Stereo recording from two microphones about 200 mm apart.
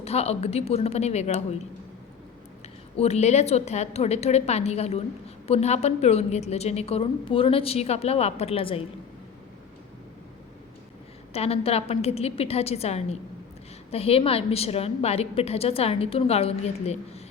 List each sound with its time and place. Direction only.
0.0 s a woman's voice: 30° left (ahead or behind)
3.0 s a woman's voice: 35° left (ahead or behind)
11.3 s a woman's voice: 30° left (ahead or behind)